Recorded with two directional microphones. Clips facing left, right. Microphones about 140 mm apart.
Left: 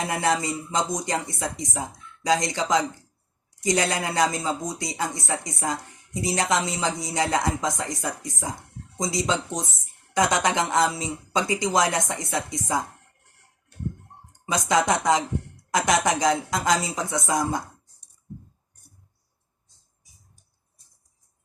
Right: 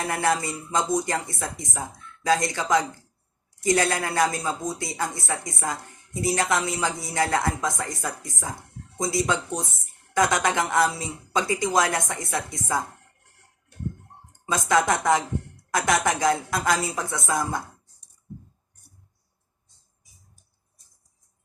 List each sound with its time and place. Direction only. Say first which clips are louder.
0.1 s speech: even; 20° left (ahead or behind)
14.7 s speech: even; 20° left (ahead or behind)